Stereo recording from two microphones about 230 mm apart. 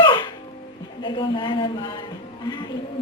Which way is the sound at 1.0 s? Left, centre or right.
Left.